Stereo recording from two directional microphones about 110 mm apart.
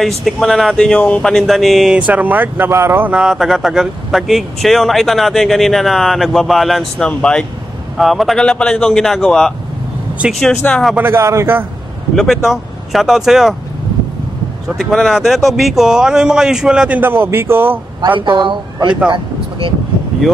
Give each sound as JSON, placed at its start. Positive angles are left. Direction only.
{"t": 0.0, "sound": "speech", "side_deg": 0}
{"t": 3.1, "sound": "speech", "side_deg": -5}
{"t": 10.2, "sound": "speech", "side_deg": -10}
{"t": 10.7, "sound": "speech", "side_deg": 0}
{"t": 11.0, "sound": "a man's voice", "side_deg": -20}
{"t": 12.2, "sound": "speech", "side_deg": 0}
{"t": 14.8, "sound": "speech", "side_deg": 0}
{"t": 18.0, "sound": "speech", "side_deg": -50}